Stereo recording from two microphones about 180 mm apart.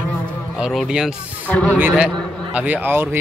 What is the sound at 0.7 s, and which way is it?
Speech, 5° right (ahead or behind).